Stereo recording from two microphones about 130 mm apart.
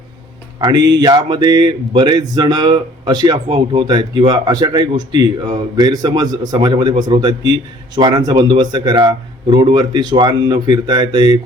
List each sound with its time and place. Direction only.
0.6 s speech: 30° right (ahead or behind)